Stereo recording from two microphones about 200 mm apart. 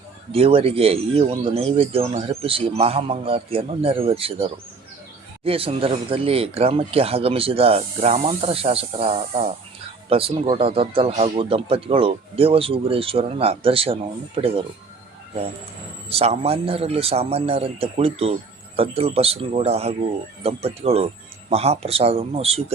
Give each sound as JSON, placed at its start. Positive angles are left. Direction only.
{"t": 0.3, "sound": "speech", "side_deg": -30}
{"t": 16.0, "sound": "speech", "side_deg": -30}